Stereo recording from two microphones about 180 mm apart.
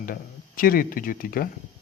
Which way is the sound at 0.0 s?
50° left (ahead or behind).